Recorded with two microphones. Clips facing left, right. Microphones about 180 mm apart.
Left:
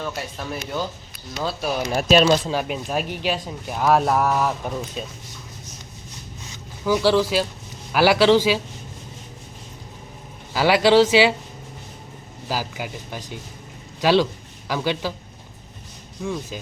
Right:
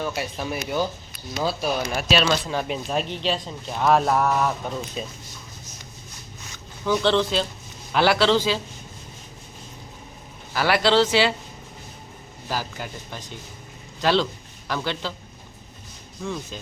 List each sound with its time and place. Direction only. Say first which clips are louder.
0.0 s speech: right 2 dB; 10° right (ahead or behind)
1.9 s speech: left 8 dB; 45° left (ahead or behind)
2.5 s speech: left 1 dB; 5° left (ahead or behind)
6.8 s speech: left 2 dB; 5° left (ahead or behind)
10.5 s speech: left 4 dB; 15° left (ahead or behind)
12.5 s speech: left 2 dB; 10° left (ahead or behind)
16.2 s speech: left 3 dB; 10° left (ahead or behind)